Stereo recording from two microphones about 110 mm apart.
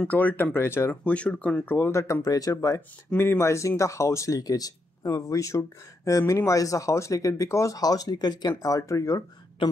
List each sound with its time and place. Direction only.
0.0 s speech: 15° left (ahead or behind)
1.1 s speech: 10° left (ahead or behind); by 2.8 s 35° left (ahead or behind)
3.1 s speech: 20° left (ahead or behind)